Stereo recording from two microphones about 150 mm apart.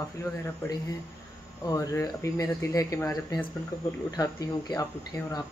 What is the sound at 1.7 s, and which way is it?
Speech, 20° left (ahead or behind).